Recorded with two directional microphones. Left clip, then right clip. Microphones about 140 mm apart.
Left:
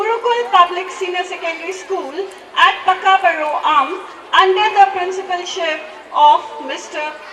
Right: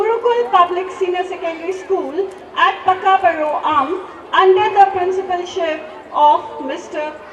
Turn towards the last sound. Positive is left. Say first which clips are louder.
# even
turn(degrees=-10)  # may be behind; listen again after turning